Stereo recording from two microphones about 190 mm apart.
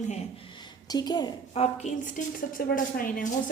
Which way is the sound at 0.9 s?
20° left (ahead or behind).